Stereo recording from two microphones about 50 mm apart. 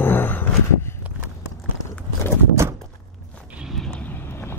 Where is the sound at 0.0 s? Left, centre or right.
Left.